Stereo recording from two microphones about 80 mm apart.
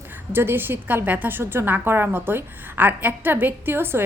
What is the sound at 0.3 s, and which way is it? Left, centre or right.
A woman's voice, right.